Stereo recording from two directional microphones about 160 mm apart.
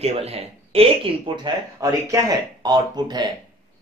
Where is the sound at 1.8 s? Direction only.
20° right (ahead or behind).